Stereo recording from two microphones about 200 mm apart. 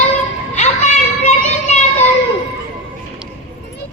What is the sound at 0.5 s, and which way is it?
Music, 35° left (ahead or behind).